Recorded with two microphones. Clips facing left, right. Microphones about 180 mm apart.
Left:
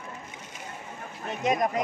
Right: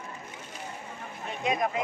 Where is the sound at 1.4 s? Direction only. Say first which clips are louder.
Left 3 dB; 45° left (ahead or behind).